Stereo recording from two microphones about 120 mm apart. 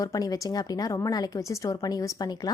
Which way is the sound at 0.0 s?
30° left (ahead or behind).